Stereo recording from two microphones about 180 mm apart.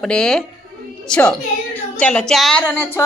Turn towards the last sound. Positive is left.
turn(degrees=5)  # may be behind; listen again after turning